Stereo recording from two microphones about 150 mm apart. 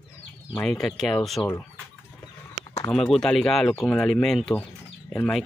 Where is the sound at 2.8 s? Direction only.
Centre (ahead or behind).